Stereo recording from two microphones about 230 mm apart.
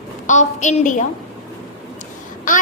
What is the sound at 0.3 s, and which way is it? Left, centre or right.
Speech, left.